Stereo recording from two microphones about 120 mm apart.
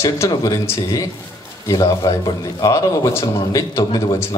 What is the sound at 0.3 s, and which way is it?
A man's voice, 35° left (ahead or behind).